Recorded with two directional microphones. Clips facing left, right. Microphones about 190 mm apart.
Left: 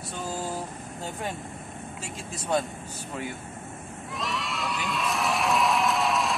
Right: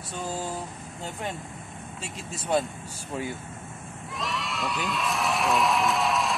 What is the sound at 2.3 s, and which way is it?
Speech, centre (ahead or behind).